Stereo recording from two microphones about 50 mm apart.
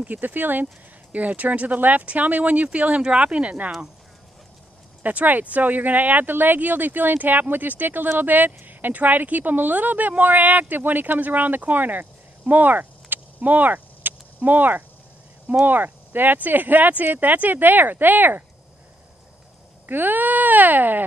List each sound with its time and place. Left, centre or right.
0.0 s speech: right
5.0 s speech: right
19.9 s speech: right